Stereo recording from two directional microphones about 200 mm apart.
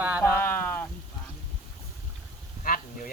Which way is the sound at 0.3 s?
10° left (ahead or behind).